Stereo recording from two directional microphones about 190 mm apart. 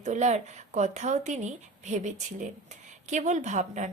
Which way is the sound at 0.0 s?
40° right (ahead or behind).